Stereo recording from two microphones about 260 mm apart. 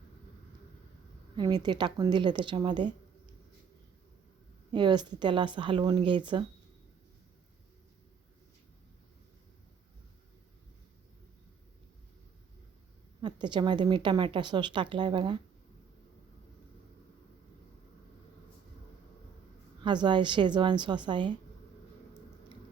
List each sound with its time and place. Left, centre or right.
1.4 s a woman's voice: centre
4.7 s a woman's voice: centre
13.2 s a woman's voice: centre
19.8 s a woman's voice: centre